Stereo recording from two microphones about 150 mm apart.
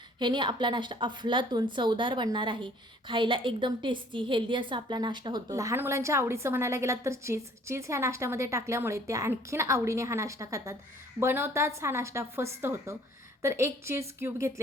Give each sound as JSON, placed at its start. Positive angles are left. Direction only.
{"t": 0.2, "sound": "a woman's voice", "side_deg": -30}